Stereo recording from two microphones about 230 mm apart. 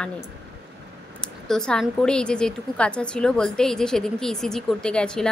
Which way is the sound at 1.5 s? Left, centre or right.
Centre.